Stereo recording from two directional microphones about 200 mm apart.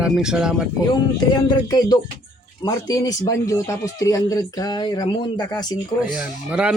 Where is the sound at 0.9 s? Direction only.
20° left (ahead or behind).